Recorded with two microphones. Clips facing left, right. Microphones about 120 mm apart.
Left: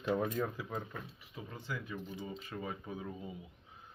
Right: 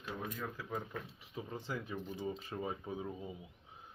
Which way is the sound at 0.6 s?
15° left (ahead or behind).